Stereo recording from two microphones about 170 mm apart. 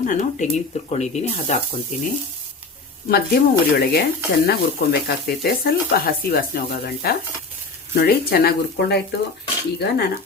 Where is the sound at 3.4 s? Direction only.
75° left (ahead or behind).